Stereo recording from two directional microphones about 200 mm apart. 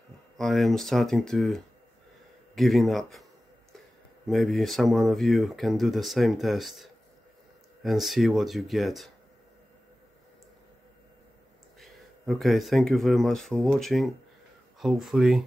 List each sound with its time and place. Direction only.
0.4 s speech: centre (ahead or behind)
4.3 s speech: centre (ahead or behind)
11.8 s speech: centre (ahead or behind)